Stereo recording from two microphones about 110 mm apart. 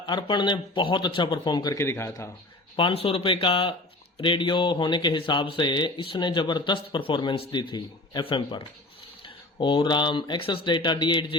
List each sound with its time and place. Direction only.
0.0 s speech: 45° left (ahead or behind)
1.8 s speech: 25° left (ahead or behind)
2.7 s speech: 55° left (ahead or behind)